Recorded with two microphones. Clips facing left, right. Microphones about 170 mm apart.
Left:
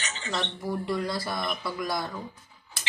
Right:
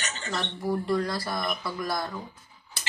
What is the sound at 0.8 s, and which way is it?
Speech, 15° left (ahead or behind).